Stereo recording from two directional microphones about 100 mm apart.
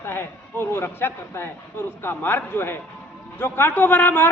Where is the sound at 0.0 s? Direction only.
25° left (ahead or behind).